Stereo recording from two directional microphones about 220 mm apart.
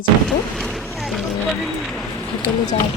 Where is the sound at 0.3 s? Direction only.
Centre (ahead or behind).